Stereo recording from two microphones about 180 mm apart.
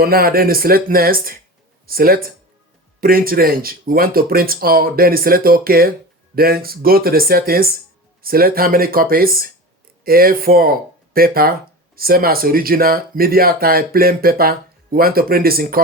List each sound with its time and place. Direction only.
0.0 s speech: 55° right (ahead or behind)